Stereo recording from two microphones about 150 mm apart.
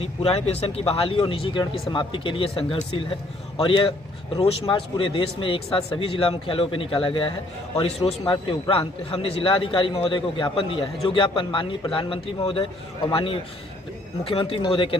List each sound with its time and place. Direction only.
0.0 s a man's voice: 40° left (ahead or behind)